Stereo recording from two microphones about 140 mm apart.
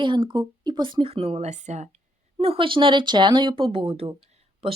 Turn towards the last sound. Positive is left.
turn(degrees=-45)  # may be behind; listen again after turning